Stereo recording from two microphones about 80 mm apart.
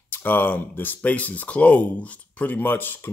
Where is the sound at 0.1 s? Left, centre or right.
Left.